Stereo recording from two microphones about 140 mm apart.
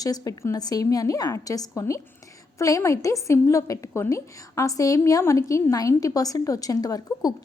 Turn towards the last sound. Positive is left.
turn(degrees=25)  # may be behind; listen again after turning